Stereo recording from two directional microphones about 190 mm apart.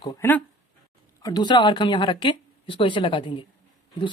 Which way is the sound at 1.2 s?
20° left (ahead or behind).